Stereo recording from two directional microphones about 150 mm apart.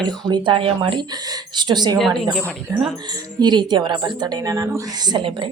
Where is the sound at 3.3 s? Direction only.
30° right (ahead or behind).